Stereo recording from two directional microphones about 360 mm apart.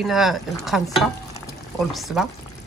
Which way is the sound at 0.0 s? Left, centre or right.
Centre.